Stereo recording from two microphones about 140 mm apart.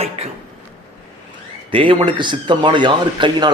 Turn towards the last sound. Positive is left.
turn(degrees=-35)  # may be behind; listen again after turning